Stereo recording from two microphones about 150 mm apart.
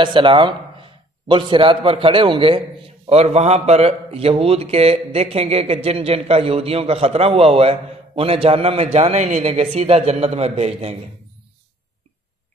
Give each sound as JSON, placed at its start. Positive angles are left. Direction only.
{"t": 0.0, "sound": "a man's voice", "side_deg": -35}